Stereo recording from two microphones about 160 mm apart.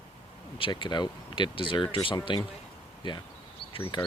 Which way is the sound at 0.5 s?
30° left (ahead or behind).